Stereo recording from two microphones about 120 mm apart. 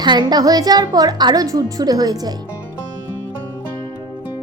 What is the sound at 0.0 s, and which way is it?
Speech, 35° right (ahead or behind).